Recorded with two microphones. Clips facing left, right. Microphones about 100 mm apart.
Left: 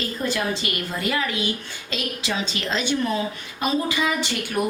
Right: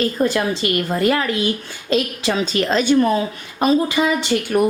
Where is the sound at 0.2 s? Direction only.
50° right (ahead or behind).